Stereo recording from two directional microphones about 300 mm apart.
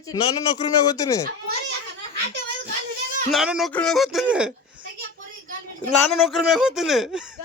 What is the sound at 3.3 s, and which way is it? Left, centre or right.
Speech, centre.